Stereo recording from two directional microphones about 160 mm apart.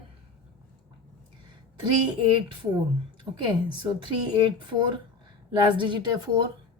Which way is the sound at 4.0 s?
30° right (ahead or behind).